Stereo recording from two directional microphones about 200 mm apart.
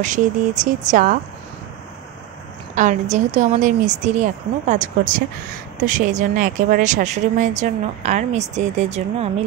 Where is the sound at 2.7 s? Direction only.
40° right (ahead or behind).